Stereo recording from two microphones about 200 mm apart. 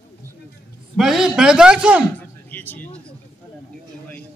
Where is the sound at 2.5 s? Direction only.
10° left (ahead or behind).